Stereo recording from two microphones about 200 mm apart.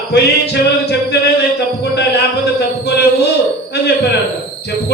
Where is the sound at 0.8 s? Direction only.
55° left (ahead or behind).